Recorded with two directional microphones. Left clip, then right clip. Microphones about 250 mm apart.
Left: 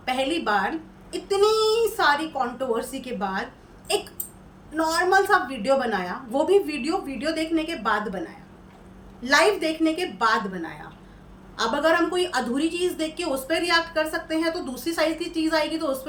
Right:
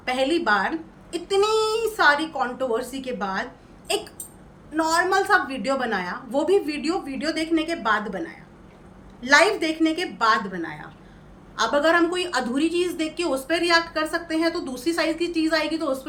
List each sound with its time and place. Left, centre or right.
0.0 s a woman's voice: centre
4.8 s a woman's voice: centre